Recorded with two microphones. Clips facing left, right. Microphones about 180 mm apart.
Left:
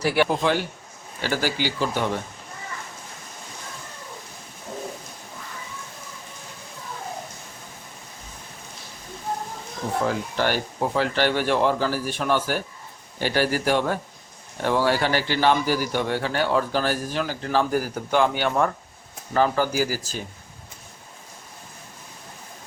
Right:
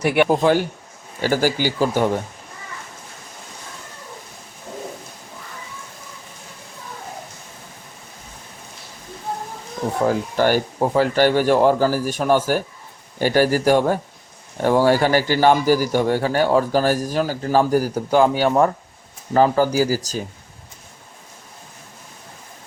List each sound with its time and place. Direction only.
0.0 s a man's voice: 20° right (ahead or behind)
0.3 s a man's voice: 45° right (ahead or behind)
10.1 s a man's voice: 45° right (ahead or behind)